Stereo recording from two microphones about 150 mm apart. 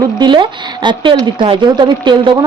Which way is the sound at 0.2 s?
30° right (ahead or behind).